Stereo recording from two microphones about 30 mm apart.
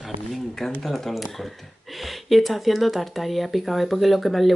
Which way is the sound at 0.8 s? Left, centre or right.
Centre.